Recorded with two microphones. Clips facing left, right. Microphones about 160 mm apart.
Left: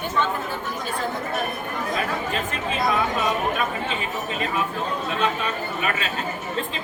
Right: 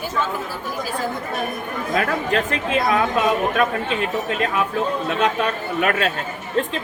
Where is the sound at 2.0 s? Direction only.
65° right (ahead or behind).